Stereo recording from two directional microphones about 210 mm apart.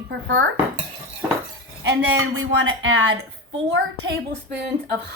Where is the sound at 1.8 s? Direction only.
55° right (ahead or behind).